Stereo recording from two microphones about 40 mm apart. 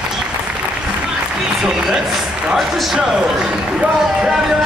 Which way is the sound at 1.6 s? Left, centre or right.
Centre.